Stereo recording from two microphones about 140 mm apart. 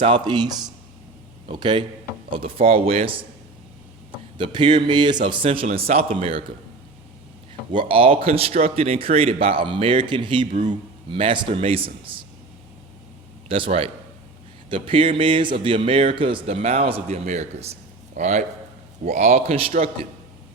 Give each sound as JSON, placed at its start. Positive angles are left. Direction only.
{"t": 0.0, "sound": "a man's voice", "side_deg": -35}
{"t": 4.4, "sound": "a man's voice", "side_deg": -35}
{"t": 7.7, "sound": "a man's voice", "side_deg": -40}
{"t": 13.5, "sound": "a man's voice", "side_deg": -40}